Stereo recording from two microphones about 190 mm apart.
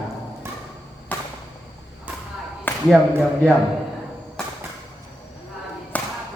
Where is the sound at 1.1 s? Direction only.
10° left (ahead or behind).